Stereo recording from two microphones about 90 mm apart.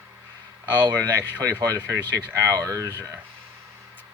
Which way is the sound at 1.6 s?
35° right (ahead or behind).